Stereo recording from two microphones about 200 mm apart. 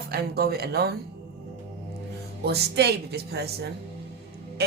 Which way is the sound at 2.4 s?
55° right (ahead or behind).